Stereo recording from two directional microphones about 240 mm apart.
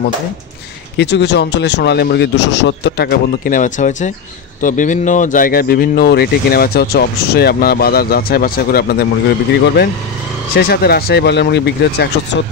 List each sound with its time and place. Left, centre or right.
0.9 s speech: left
10.5 s speech: left